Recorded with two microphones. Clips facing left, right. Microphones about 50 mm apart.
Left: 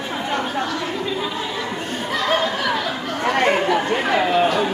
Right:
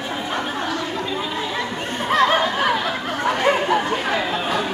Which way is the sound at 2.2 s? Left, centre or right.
Centre.